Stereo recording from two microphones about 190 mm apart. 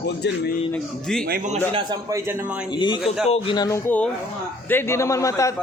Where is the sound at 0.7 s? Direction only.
5° left (ahead or behind).